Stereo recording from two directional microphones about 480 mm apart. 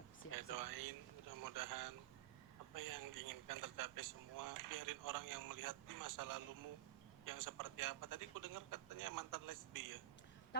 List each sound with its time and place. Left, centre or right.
0.3 s speech: right
10.5 s speech: left